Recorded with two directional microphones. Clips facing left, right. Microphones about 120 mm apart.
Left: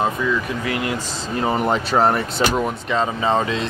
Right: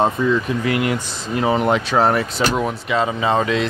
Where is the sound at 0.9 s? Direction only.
10° right (ahead or behind).